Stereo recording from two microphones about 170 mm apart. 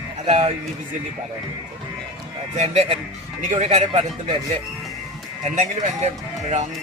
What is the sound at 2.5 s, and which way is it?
Speech, 40° right (ahead or behind).